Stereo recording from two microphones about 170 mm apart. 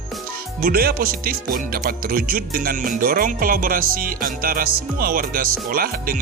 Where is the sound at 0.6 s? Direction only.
60° right (ahead or behind).